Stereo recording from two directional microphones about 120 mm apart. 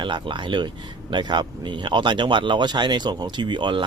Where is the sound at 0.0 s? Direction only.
40° right (ahead or behind).